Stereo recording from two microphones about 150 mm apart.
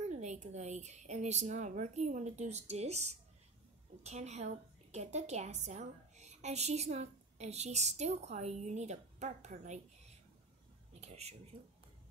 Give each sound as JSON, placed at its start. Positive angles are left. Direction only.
{"t": 0.0, "sound": "a woman's voice", "side_deg": -50}